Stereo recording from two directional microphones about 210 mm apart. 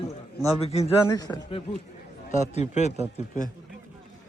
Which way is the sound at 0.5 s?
30° left (ahead or behind).